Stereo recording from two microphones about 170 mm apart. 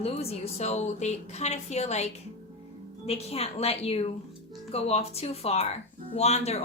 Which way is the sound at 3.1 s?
35° left (ahead or behind).